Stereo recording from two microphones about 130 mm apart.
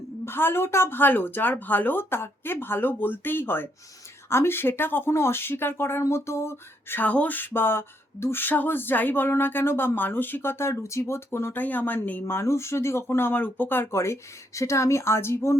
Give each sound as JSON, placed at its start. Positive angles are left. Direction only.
{"t": 0.3, "sound": "speech", "side_deg": 15}